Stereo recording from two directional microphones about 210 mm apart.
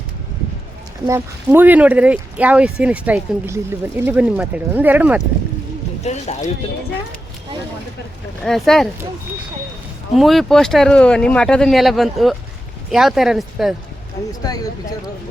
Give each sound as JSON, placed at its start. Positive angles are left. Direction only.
{"t": 1.0, "sound": "speech", "side_deg": -10}
{"t": 6.0, "sound": "speech", "side_deg": 30}
{"t": 8.4, "sound": "speech", "side_deg": 0}
{"t": 10.2, "sound": "speech", "side_deg": 0}
{"t": 14.4, "sound": "speech", "side_deg": 20}